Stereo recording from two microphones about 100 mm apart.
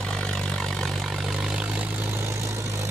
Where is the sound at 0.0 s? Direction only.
5° left (ahead or behind).